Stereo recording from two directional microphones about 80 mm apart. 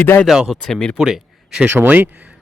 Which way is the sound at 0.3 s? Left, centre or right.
Centre.